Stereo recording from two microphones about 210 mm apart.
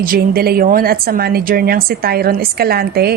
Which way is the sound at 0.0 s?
45° right (ahead or behind).